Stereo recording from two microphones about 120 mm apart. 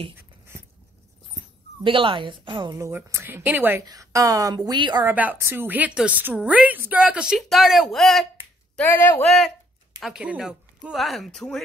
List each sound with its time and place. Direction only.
1.9 s a woman's voice: 45° right (ahead or behind)
2.7 s speech: 25° right (ahead or behind)
3.8 s a woman's voice: 30° right (ahead or behind)
5.0 s a woman's voice: 15° right (ahead or behind); by 8.3 s centre (ahead or behind)
8.7 s speech: 20° left (ahead or behind)
9.2 s speech: 5° left (ahead or behind)